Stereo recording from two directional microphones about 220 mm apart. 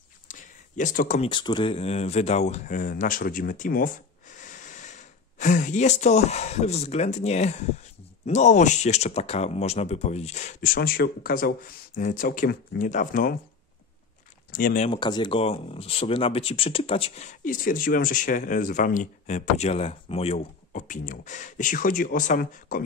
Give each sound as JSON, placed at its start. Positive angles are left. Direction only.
{"t": 0.3, "sound": "a sound", "side_deg": 35}
{"t": 1.3, "sound": "speech", "side_deg": 20}
{"t": 14.5, "sound": "speech", "side_deg": 35}
{"t": 14.9, "sound": "speech", "side_deg": 20}